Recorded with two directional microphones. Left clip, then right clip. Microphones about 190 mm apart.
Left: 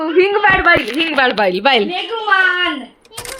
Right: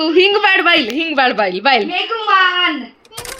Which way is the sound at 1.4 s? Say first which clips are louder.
Left 1 dB; 15° left (ahead or behind).